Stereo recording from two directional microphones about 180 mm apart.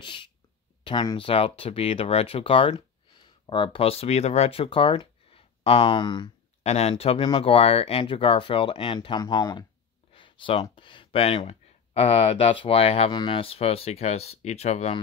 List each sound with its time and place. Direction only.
0.0 s speech: 25° left (ahead or behind)